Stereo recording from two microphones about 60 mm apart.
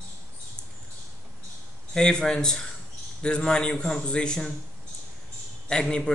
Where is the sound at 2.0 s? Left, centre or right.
Centre.